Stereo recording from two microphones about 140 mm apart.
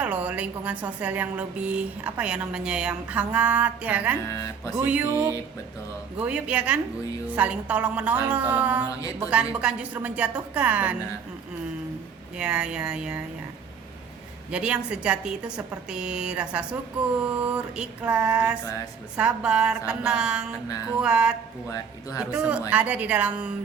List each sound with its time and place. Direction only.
0.0 s a woman's voice: 10° right (ahead or behind)
4.3 s speech: 25° left (ahead or behind)
4.7 s a woman's voice: 15° right (ahead or behind)
6.1 s a woman's voice: 10° right (ahead or behind)
8.9 s speech: 25° left (ahead or behind)
9.1 s a woman's voice: 10° right (ahead or behind)
12.4 s a woman's voice: 5° right (ahead or behind)
14.5 s a woman's voice: 5° right (ahead or behind)